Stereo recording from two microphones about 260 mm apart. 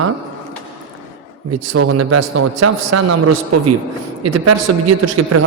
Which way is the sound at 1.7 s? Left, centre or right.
Right.